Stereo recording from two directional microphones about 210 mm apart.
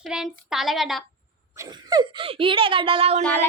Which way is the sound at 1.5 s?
15° right (ahead or behind).